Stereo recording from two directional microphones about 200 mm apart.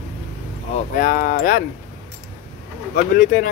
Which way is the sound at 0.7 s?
40° left (ahead or behind).